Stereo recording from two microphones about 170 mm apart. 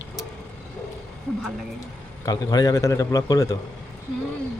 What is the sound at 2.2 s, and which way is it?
A man's voice, 20° left (ahead or behind).